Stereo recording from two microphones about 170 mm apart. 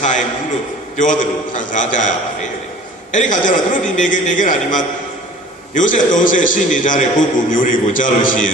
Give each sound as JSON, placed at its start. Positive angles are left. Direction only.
{"t": 0.9, "sound": "a man's voice", "side_deg": 50}
{"t": 3.1, "sound": "a man's voice", "side_deg": 50}